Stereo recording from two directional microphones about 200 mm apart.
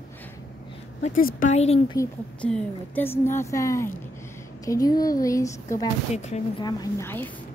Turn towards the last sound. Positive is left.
turn(degrees=10)  # may be behind; listen again after turning